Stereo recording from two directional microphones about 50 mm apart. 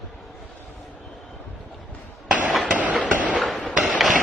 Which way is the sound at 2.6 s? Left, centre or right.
Right.